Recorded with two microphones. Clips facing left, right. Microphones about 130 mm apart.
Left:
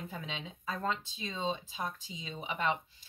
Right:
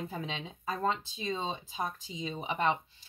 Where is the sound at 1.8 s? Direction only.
35° right (ahead or behind).